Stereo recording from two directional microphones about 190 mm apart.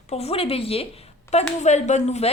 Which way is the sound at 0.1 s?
30° left (ahead or behind).